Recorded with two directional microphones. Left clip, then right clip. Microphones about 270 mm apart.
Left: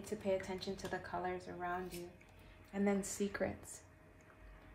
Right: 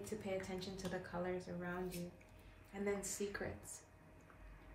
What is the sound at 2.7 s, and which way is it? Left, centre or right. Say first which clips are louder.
Speech: left 4 dB; left.